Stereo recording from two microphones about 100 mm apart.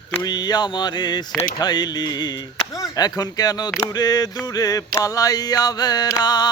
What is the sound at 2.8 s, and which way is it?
Speech, 40° left (ahead or behind).